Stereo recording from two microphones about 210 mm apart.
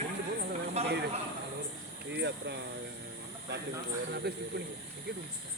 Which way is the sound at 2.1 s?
55° right (ahead or behind).